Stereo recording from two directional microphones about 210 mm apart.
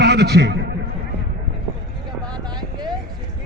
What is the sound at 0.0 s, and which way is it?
Speech, 55° right (ahead or behind).